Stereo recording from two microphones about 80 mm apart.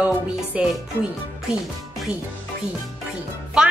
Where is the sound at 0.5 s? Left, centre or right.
Centre.